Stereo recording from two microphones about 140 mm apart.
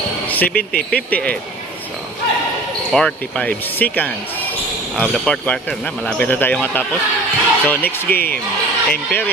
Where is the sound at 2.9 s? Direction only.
5° left (ahead or behind).